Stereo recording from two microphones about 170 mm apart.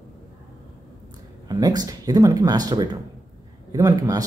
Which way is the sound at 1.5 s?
20° right (ahead or behind).